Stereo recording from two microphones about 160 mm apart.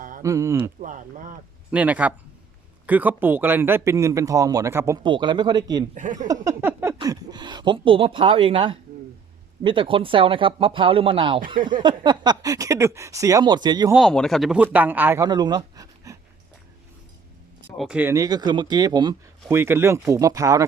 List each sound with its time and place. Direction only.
0.2 s speech: 20° right (ahead or behind)
0.8 s speech: 50° right (ahead or behind)
1.7 s a man's voice: 10° right (ahead or behind)
5.0 s speech: 30° right (ahead or behind)
5.9 s speech: 50° right (ahead or behind)
6.1 s a sound: 20° right (ahead or behind)
7.0 s speech: 25° right (ahead or behind)
13.9 s a man's voice: centre (ahead or behind); by 15.3 s 15° right (ahead or behind)
15.3 s speech: 25° right (ahead or behind)
17.7 s a man's voice: 5° right (ahead or behind)
18.1 s speech: 20° right (ahead or behind)